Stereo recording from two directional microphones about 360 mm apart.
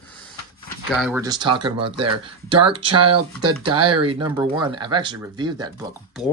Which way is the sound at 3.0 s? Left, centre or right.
Right.